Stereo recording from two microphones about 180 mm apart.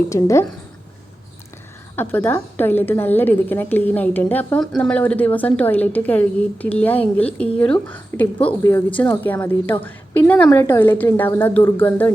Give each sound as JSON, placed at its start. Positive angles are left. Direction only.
{"t": 0.1, "sound": "a woman's voice", "side_deg": 15}
{"t": 2.0, "sound": "a woman's voice", "side_deg": 10}